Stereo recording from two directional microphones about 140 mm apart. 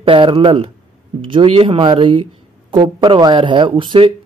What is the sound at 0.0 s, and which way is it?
Speech, 40° right (ahead or behind).